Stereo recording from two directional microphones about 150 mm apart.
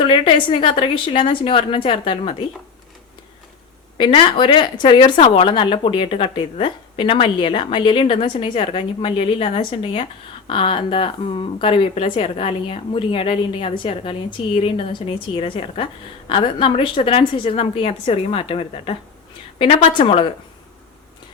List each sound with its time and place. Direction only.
0.0 s a woman's voice: 35° left (ahead or behind)
3.9 s a woman's voice: 35° left (ahead or behind)